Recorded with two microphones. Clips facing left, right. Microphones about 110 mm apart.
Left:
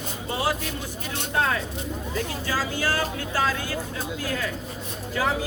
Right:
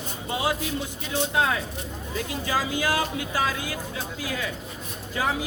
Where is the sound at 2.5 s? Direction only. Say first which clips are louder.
Right 2 dB; 15° right (ahead or behind).